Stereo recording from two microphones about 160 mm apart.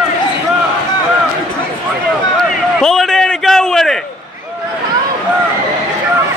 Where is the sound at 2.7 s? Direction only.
Centre (ahead or behind).